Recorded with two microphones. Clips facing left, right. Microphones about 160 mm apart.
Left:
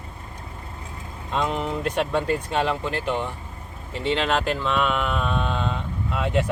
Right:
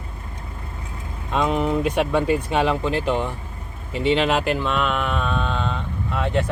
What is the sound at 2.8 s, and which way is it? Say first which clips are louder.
Speech: right 4 dB; 20° right (ahead or behind).